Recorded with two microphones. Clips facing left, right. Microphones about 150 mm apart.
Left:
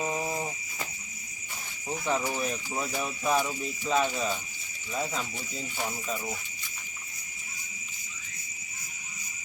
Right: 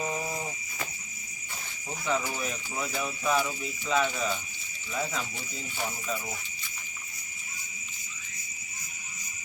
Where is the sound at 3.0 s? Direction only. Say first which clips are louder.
Even; 20° left (ahead or behind).